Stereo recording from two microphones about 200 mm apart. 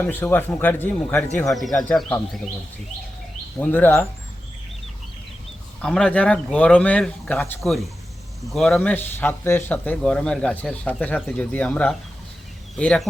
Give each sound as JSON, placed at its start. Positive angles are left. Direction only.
{"t": 0.0, "sound": "speech", "side_deg": 10}
{"t": 3.6, "sound": "speech", "side_deg": 10}
{"t": 5.8, "sound": "speech", "side_deg": 5}